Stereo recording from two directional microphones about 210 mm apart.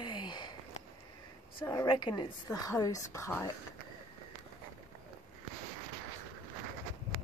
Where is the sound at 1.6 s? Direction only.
20° left (ahead or behind).